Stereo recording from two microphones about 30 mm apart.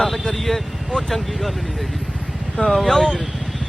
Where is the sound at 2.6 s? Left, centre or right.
Centre.